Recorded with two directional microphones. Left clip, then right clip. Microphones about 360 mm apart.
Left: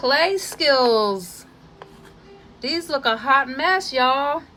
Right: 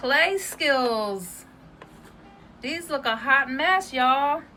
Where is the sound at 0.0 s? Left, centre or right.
Centre.